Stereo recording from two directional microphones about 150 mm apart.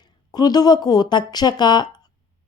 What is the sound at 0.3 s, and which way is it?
Speech, 25° left (ahead or behind).